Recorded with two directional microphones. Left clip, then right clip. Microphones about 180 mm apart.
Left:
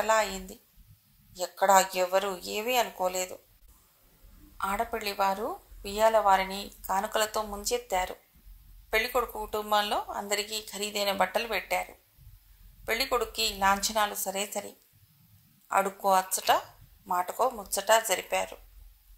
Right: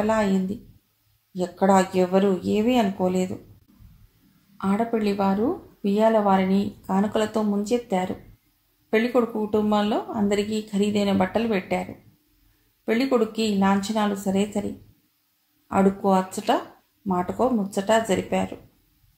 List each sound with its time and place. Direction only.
0.0 s speech: 40° left (ahead or behind)
4.6 s speech: 40° left (ahead or behind)
15.7 s speech: 40° left (ahead or behind)